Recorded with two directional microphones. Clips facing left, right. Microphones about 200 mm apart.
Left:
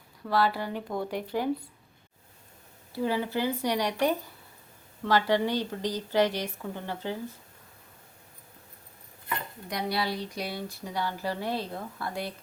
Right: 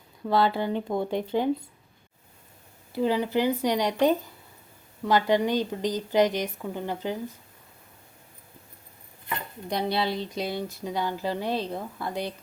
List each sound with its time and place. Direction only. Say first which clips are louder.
0.3 s speech: right 3 dB; 25° right (ahead or behind)
2.9 s speech: right 4 dB; 20° right (ahead or behind)
9.6 s speech: right 4 dB; 25° right (ahead or behind)